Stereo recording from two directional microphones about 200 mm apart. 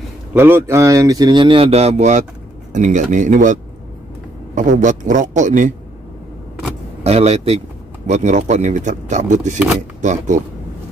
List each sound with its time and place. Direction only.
0.3 s speech: 10° right (ahead or behind); by 3.5 s 40° right (ahead or behind)
4.6 s speech: 40° right (ahead or behind)
7.0 s speech: 30° right (ahead or behind)